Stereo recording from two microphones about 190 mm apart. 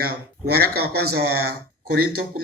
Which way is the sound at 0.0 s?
55° right (ahead or behind).